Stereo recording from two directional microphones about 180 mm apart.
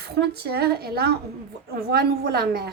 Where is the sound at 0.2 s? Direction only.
65° right (ahead or behind).